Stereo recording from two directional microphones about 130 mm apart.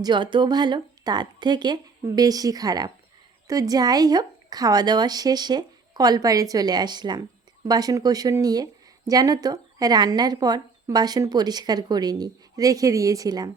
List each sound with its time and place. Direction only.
0.0 s speech: 35° right (ahead or behind)